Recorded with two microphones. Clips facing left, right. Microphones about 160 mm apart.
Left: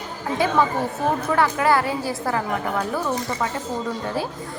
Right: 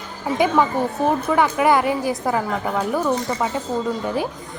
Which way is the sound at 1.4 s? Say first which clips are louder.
Right 2 dB; 15° right (ahead or behind).